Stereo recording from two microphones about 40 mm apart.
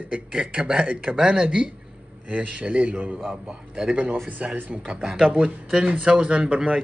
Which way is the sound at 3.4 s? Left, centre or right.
Centre.